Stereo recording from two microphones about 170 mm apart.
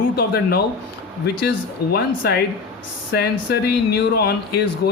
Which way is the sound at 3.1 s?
70° left (ahead or behind).